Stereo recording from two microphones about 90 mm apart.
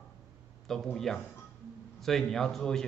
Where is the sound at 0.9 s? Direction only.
5° left (ahead or behind).